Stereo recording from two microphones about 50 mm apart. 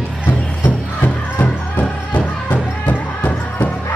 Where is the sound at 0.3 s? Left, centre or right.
Left.